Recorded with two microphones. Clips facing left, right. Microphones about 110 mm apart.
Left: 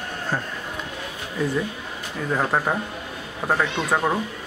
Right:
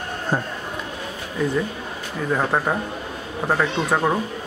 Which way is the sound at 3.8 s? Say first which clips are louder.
Right 1 dB; 5° right (ahead or behind).